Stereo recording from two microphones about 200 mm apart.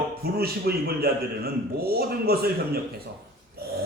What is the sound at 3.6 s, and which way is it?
Pig, 50° right (ahead or behind).